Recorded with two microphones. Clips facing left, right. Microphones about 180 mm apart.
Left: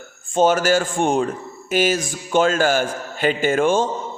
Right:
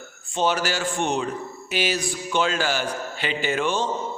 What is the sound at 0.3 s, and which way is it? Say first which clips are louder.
A man's voice: left 7 dB; 45° left (ahead or behind).